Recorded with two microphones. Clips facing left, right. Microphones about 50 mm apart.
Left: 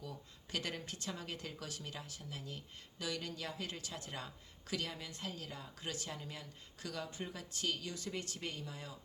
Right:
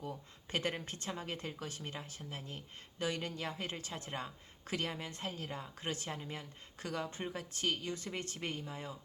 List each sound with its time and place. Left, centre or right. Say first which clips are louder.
0.0 s a woman's voice: right 5 dB; right